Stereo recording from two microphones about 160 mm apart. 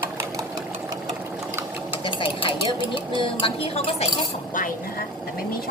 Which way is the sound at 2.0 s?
35° left (ahead or behind).